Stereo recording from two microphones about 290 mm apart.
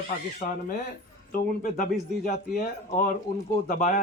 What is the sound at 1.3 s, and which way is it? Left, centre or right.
Speech, left.